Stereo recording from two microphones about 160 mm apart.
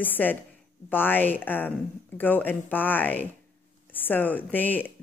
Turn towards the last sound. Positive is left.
turn(degrees=10)  # may be behind; listen again after turning